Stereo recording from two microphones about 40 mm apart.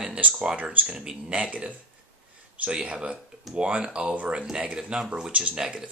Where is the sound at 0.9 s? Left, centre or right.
Centre.